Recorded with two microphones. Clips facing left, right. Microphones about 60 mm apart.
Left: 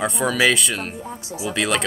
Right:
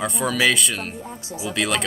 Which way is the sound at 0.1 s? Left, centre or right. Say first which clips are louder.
Left 2 dB; centre.